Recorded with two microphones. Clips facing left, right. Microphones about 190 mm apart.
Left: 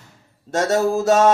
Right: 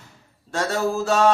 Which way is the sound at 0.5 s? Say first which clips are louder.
Left 5 dB; 45° left (ahead or behind).